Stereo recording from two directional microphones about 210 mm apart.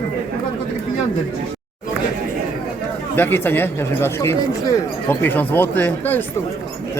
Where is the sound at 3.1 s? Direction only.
10° left (ahead or behind).